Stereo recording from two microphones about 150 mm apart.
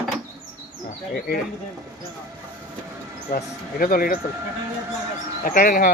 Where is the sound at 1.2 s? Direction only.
90° left.